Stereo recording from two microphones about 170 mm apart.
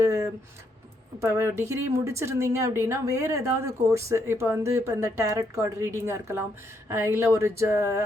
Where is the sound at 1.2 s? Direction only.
15° right (ahead or behind).